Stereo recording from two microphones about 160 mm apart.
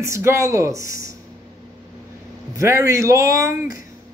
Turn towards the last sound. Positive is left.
turn(degrees=-20)  # may be behind; listen again after turning